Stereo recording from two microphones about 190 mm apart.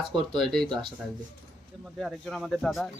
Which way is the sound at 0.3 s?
Centre (ahead or behind).